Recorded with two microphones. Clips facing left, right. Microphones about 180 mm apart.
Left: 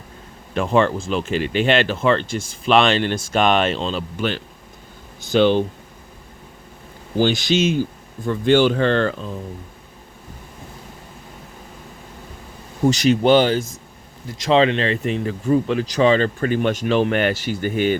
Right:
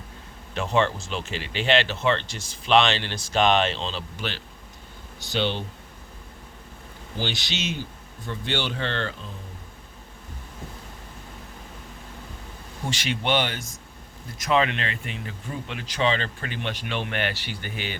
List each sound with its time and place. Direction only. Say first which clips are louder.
0.5 s speech: left 6 dB; 50° left (ahead or behind)
7.2 s speech: left 13 dB; 50° left (ahead or behind)
12.8 s speech: left 13 dB; 40° left (ahead or behind)